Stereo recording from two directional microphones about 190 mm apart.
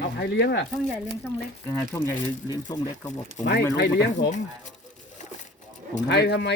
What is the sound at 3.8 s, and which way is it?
Speech, 65° left (ahead or behind).